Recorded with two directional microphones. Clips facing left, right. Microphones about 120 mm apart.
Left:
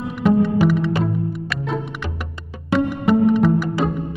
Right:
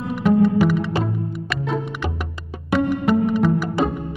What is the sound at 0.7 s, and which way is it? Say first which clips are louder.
Music: left 2 dB; centre (ahead or behind).